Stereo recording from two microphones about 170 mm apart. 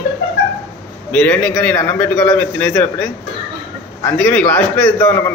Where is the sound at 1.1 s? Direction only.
10° left (ahead or behind).